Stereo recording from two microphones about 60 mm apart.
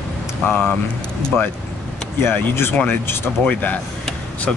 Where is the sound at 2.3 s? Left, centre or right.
Left.